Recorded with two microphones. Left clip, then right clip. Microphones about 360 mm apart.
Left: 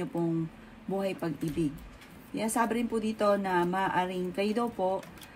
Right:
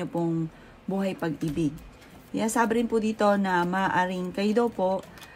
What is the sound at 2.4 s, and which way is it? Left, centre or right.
Speech, right.